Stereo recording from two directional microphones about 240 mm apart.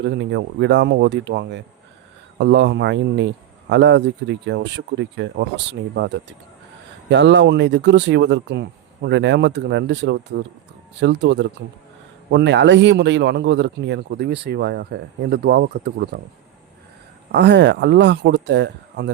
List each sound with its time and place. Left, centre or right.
0.0 s a man's voice: right
17.3 s a man's voice: right